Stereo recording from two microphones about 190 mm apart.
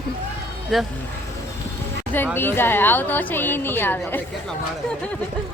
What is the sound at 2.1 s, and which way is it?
A woman's voice, 10° left (ahead or behind).